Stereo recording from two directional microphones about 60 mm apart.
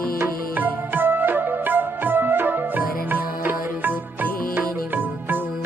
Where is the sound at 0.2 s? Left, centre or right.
Right.